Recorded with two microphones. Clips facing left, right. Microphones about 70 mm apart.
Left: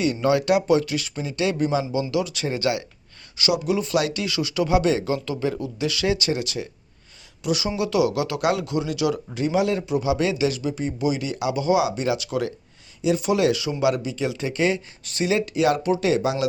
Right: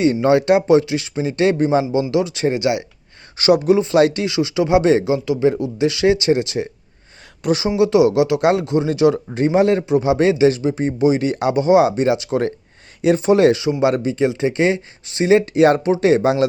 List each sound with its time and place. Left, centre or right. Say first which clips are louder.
0.0 s speech: right 6 dB; right
1.3 s speech: right 7 dB; right
3.3 s speech: right 9 dB; right
5.0 s speech: right 7 dB; centre
5.5 s speech: right 8 dB; right
13.9 s speech: right 8 dB; right